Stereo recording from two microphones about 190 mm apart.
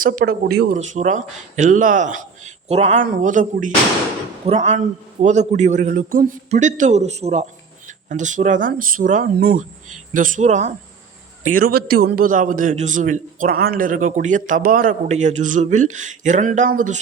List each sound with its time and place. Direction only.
0.0 s a man's voice: 45° right (ahead or behind)
0.8 s a man's voice: 40° right (ahead or behind)
11.4 s a man's voice: 50° right (ahead or behind)